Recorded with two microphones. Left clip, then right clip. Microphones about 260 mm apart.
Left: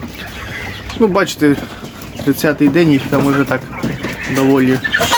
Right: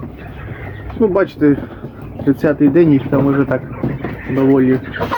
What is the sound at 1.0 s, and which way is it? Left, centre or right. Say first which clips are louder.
Speech: left 1 dB; centre.